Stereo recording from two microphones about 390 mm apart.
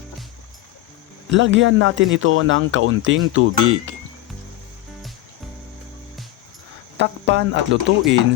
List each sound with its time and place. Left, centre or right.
1.3 s speech: right
6.9 s speech: right